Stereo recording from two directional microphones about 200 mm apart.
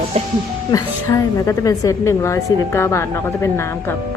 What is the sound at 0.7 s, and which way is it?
A woman's voice, 15° left (ahead or behind).